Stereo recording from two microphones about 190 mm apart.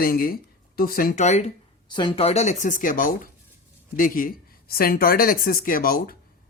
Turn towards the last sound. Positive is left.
turn(degrees=50)  # may be behind; listen again after turning